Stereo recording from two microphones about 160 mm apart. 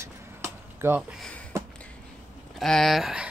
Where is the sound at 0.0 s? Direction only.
15° right (ahead or behind).